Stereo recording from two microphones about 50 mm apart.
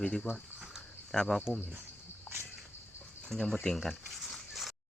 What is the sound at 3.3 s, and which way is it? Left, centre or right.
Speech, centre.